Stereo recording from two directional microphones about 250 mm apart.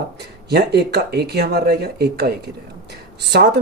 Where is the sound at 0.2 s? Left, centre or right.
Right.